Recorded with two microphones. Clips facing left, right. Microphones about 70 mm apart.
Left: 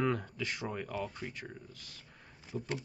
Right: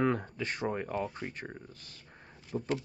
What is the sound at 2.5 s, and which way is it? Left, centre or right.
Speech, right.